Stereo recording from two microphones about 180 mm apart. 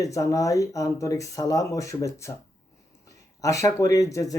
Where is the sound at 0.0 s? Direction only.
20° left (ahead or behind).